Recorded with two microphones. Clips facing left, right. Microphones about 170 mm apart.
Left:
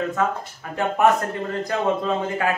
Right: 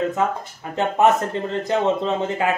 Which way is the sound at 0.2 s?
20° right (ahead or behind).